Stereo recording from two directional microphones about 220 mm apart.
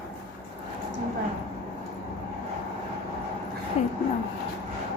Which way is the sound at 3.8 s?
30° left (ahead or behind).